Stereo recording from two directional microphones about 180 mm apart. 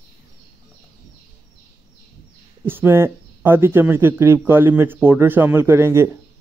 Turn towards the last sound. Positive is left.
turn(degrees=-15)  # may be behind; listen again after turning